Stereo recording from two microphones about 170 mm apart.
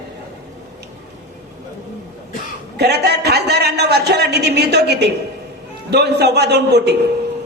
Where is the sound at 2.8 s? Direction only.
75° right (ahead or behind).